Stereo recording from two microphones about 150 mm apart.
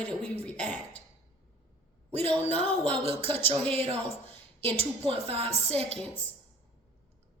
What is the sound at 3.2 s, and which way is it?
Speech, 15° left (ahead or behind).